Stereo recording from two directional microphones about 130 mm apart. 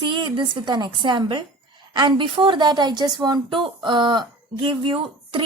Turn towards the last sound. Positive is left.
turn(degrees=-40)  # may be behind; listen again after turning